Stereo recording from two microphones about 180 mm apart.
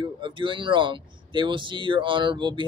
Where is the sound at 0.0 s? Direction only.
25° right (ahead or behind).